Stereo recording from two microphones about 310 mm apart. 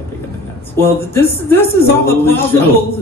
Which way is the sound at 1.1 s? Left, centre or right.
Centre.